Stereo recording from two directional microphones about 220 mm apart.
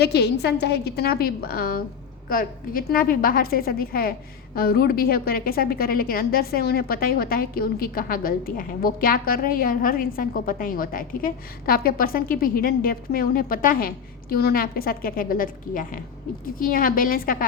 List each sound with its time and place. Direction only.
0.0 s a woman's voice: 50° left (ahead or behind)